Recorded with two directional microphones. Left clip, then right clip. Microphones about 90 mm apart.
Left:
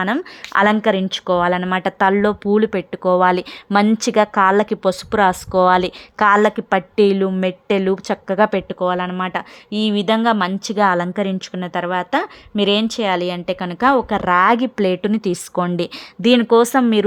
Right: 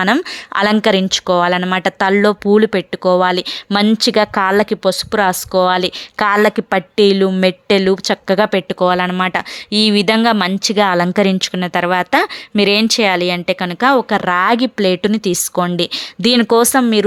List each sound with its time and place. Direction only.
0.0 s speech: 35° right (ahead or behind)
0.7 s speech: 25° right (ahead or behind)
3.9 s speech: 40° right (ahead or behind)
4.2 s speech: 10° right (ahead or behind)
7.2 s speech: 20° right (ahead or behind)
8.6 s speech: 30° right (ahead or behind)
9.9 s speech: 40° right (ahead or behind); by 16.0 s centre (ahead or behind)
16.4 s speech: 35° right (ahead or behind)
16.7 s speech: 5° right (ahead or behind)